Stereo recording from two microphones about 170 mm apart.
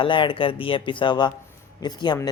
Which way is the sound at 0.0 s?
30° left (ahead or behind).